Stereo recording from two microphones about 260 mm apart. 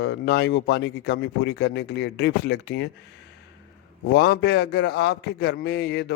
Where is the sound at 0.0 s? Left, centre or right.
Left.